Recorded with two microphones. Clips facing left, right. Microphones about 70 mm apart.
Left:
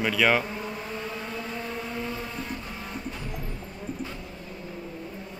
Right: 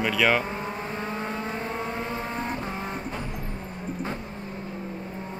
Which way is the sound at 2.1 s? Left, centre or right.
Right.